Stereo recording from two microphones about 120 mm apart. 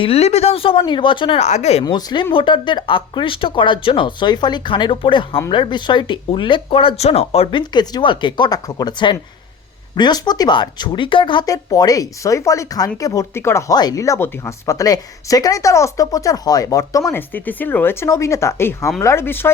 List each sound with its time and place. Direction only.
0.0 s speech: 60° left (ahead or behind)
1.4 s speech: 70° left (ahead or behind)
1.8 s speech: 35° left (ahead or behind); by 7.6 s 55° left (ahead or behind)
7.6 s speech: 35° left (ahead or behind)
11.4 s speech: 30° left (ahead or behind)
17.1 s speech: 15° left (ahead or behind)